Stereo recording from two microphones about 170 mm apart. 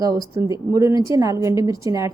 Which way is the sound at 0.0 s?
20° right (ahead or behind).